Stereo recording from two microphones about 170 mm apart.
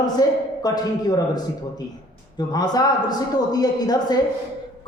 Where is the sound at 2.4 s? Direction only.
25° left (ahead or behind).